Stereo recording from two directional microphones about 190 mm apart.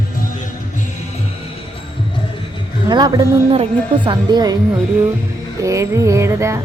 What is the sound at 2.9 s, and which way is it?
A woman's voice, 25° right (ahead or behind).